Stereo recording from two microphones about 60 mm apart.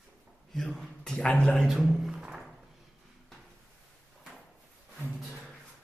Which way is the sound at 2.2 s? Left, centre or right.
Centre.